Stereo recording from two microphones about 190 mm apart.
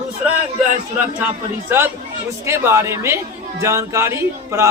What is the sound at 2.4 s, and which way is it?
Speech, 15° right (ahead or behind).